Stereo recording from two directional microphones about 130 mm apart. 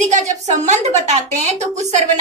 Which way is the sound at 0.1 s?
65° right (ahead or behind).